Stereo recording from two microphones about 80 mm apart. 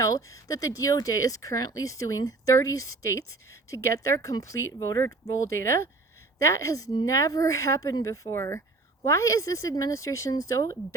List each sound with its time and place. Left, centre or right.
0.0 s speech: left